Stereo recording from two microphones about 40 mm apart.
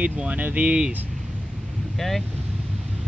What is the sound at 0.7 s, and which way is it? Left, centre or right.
Speech, right.